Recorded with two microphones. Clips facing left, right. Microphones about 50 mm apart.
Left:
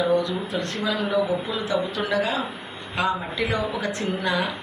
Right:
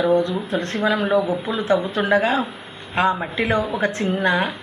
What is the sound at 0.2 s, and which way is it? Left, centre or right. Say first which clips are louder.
A woman's voice: right 4 dB; right.